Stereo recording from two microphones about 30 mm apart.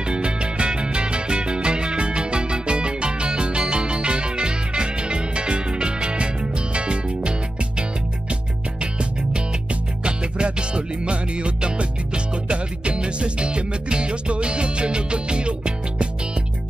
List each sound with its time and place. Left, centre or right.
0.0 s music: right
10.0 s music: right